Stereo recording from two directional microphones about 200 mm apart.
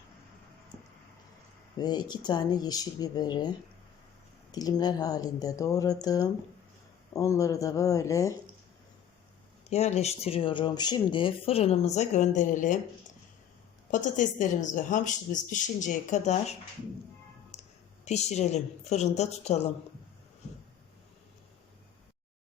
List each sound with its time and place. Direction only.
1.8 s speech: 20° left (ahead or behind)
4.5 s speech: 20° left (ahead or behind)
9.6 s speech: 35° left (ahead or behind)
13.9 s a woman's voice: 40° left (ahead or behind)